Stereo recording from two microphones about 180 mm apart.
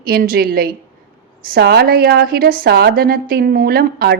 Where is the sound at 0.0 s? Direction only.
55° right (ahead or behind).